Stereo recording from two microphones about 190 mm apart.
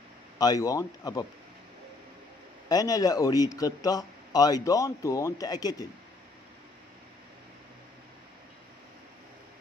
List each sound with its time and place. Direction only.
0.4 s a man's voice: 20° left (ahead or behind)
2.7 s a man's voice: 20° left (ahead or behind)